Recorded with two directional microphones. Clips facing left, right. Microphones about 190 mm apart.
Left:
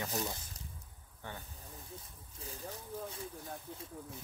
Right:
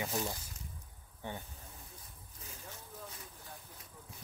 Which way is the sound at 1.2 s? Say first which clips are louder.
Right 4 dB; 20° right (ahead or behind).